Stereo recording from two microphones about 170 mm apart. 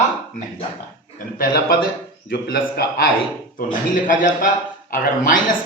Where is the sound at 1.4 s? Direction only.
60° left (ahead or behind).